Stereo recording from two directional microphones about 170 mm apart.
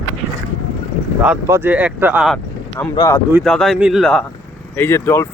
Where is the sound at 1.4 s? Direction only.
15° right (ahead or behind).